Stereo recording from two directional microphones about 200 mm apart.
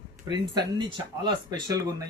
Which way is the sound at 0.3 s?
20° right (ahead or behind).